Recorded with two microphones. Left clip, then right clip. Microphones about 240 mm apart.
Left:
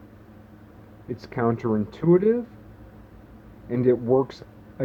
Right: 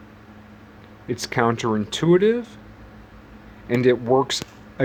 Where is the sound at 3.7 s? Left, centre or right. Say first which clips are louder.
Right 3 dB; right.